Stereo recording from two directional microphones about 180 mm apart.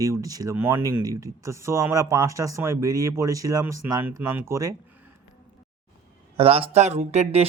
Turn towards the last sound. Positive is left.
turn(degrees=-35)  # may be behind; listen again after turning